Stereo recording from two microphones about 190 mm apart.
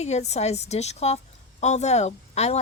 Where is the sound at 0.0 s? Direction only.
35° left (ahead or behind).